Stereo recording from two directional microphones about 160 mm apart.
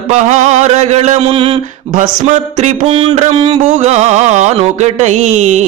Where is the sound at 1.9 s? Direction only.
45° right (ahead or behind).